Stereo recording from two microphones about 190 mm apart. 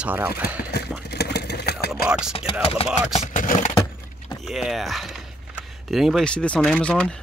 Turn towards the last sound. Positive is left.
turn(degrees=5)  # may be behind; listen again after turning